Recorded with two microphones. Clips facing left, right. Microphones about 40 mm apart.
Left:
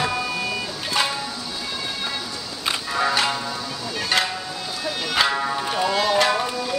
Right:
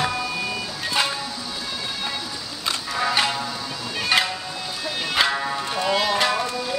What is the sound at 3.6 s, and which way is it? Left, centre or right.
Music, centre.